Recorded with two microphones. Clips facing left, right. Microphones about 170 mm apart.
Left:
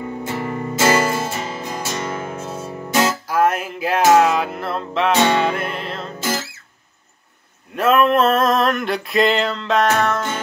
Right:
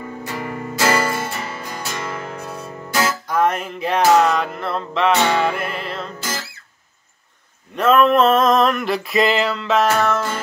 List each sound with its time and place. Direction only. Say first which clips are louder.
0.0 s music: left 3 dB; 20° left (ahead or behind)
3.3 s music: left 1 dB; 5° left (ahead or behind)
5.1 s music: left 3 dB; 20° left (ahead or behind)
5.4 s music: even; centre (ahead or behind)
6.1 s music: left 5 dB; 25° left (ahead or behind)
7.7 s male singing: right 1 dB; centre (ahead or behind)